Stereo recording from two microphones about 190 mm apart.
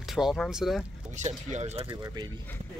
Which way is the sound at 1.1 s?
40° right (ahead or behind).